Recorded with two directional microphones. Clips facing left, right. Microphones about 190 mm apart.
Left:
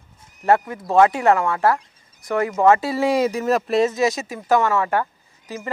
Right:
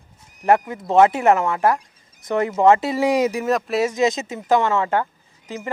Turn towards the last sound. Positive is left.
turn(degrees=-20)  # may be behind; listen again after turning